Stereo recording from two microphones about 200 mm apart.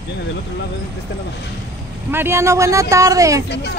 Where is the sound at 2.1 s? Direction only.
10° right (ahead or behind).